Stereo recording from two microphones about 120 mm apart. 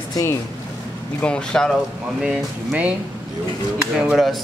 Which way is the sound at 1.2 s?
10° left (ahead or behind).